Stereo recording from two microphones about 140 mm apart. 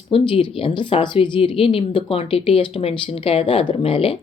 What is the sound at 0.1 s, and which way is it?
Speech, 40° left (ahead or behind).